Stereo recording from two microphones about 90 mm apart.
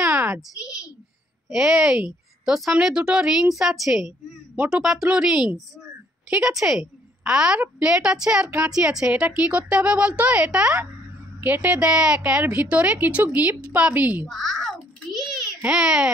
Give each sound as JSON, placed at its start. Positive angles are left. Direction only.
{"t": 0.1, "sound": "a sound", "side_deg": -25}
{"t": 0.6, "sound": "a woman's voice", "side_deg": -5}
{"t": 14.3, "sound": "a child's voice", "side_deg": 0}
{"t": 15.6, "sound": "a woman's voice", "side_deg": -10}